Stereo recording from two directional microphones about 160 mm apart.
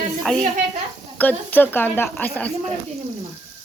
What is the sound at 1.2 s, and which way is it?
Speech, 10° left (ahead or behind).